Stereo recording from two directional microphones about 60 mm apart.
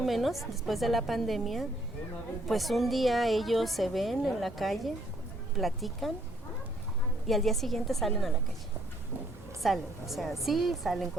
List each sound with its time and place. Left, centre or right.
0.0 s a woman's voice: centre
7.3 s a woman's voice: centre
9.6 s a woman's voice: centre